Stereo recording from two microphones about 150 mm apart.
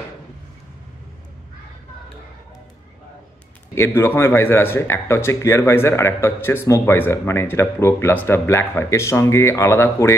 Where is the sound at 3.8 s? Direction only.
15° left (ahead or behind).